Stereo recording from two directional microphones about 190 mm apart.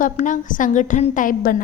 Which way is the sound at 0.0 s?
45° left (ahead or behind).